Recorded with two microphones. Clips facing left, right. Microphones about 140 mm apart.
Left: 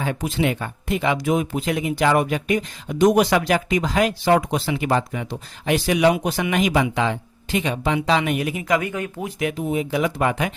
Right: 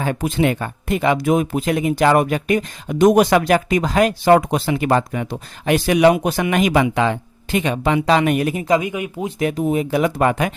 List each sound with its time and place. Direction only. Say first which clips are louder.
0.0 s speech: right 4 dB; 50° right (ahead or behind)
8.8 s speech: right 3 dB; 15° right (ahead or behind)
9.4 s speech: right 4 dB; 40° right (ahead or behind)